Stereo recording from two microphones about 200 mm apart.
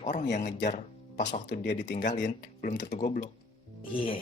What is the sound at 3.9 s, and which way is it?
Speech, 25° left (ahead or behind).